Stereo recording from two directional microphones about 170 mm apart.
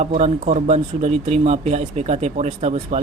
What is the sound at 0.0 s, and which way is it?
Speech, 40° right (ahead or behind).